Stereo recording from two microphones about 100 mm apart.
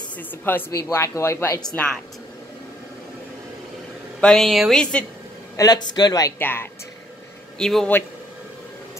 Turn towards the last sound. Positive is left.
turn(degrees=5)  # may be behind; listen again after turning